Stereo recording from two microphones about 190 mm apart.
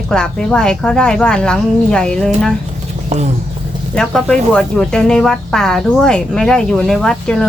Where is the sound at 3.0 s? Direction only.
35° right (ahead or behind).